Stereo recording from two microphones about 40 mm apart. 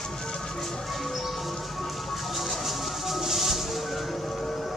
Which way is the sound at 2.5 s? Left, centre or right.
Centre.